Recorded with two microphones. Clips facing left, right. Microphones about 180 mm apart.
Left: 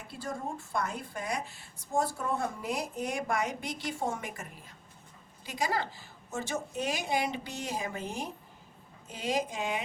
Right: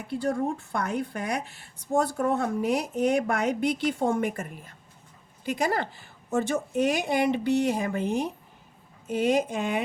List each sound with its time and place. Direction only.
0.1 s speech: 65° right (ahead or behind)